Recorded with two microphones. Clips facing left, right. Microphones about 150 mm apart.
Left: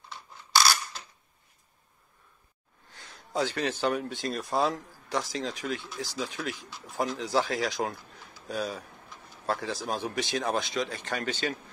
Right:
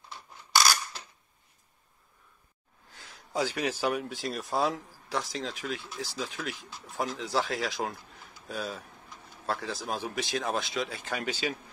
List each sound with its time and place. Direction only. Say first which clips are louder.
2.9 s speech: left 2 dB; 5° right (ahead or behind)